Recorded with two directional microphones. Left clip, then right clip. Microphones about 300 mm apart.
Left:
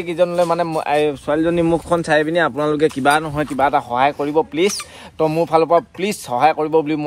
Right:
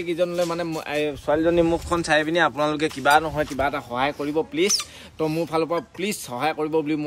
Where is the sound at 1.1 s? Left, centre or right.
Centre.